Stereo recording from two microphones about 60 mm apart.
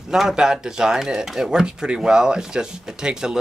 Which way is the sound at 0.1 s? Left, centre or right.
Centre.